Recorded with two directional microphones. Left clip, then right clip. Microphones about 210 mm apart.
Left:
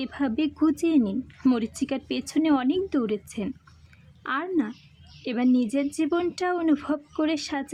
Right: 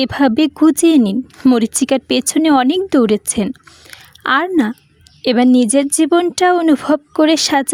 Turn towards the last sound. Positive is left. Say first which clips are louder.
# right 15 dB
turn(degrees=-45)  # may be behind; listen again after turning